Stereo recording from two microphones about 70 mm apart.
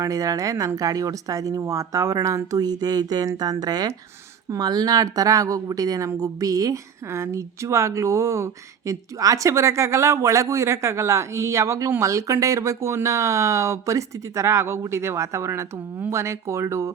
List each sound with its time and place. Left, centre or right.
0.0 s speech: right
2.6 s speech: right
7.1 s speech: right